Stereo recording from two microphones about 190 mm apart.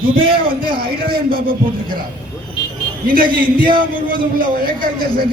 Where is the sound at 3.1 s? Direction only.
45° right (ahead or behind).